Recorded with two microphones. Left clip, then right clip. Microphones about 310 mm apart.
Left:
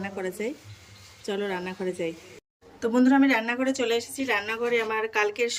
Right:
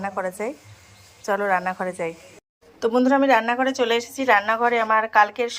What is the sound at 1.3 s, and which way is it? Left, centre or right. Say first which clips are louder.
Speech: right 9 dB; right.